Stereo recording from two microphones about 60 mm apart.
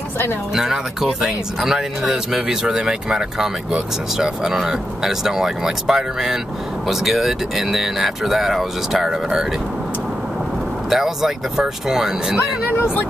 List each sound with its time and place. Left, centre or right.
1.2 s speech: centre
10.9 s speech: centre
12.4 s speech: left